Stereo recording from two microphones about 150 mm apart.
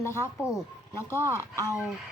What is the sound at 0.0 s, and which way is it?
Speech, 15° left (ahead or behind).